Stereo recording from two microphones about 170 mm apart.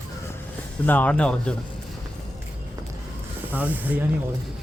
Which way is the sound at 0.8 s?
10° left (ahead or behind).